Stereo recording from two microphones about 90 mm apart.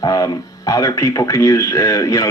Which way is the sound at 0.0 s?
45° left (ahead or behind).